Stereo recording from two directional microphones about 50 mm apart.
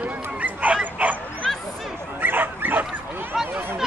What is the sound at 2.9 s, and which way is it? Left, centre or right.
Bow-wow, right.